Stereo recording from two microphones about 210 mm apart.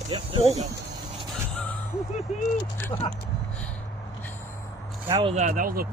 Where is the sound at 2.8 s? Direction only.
10° left (ahead or behind).